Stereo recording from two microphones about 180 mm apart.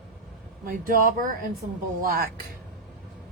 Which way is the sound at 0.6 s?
50° right (ahead or behind).